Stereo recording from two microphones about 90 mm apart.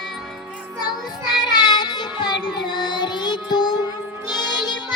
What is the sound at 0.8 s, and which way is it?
Child singing, 55° left (ahead or behind).